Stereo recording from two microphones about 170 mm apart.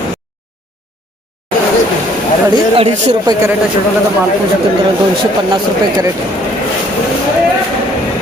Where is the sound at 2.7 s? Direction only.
30° right (ahead or behind).